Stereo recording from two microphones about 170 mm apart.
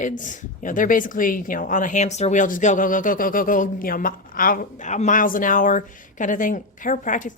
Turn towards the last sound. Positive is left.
turn(degrees=50)  # may be behind; listen again after turning